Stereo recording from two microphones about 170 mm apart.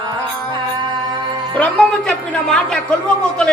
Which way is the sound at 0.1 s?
25° right (ahead or behind).